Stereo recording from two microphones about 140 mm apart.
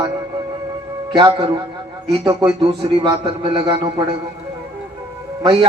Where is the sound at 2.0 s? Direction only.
25° right (ahead or behind).